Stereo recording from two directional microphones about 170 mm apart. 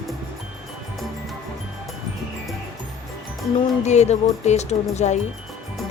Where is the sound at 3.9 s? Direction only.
40° left (ahead or behind).